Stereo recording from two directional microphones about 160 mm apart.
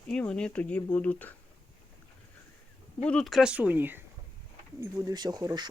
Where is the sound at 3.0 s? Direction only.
5° left (ahead or behind); by 5.7 s 25° right (ahead or behind).